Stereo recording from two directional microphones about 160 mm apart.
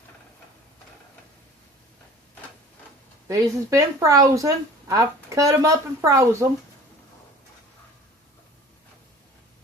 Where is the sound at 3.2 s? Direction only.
20° right (ahead or behind).